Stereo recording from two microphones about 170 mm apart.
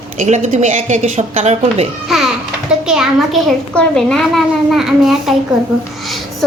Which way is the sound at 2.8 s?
5° right (ahead or behind).